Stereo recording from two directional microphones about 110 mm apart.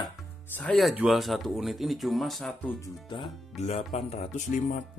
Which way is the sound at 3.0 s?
45° left (ahead or behind).